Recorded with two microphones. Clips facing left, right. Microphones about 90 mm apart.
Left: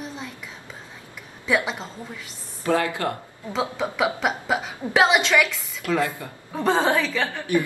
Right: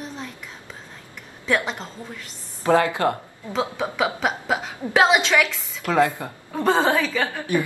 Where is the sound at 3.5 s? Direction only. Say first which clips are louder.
Right 1 dB; centre (ahead or behind).